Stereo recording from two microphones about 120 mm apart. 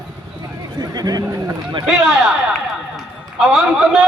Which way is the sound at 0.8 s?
35° right (ahead or behind).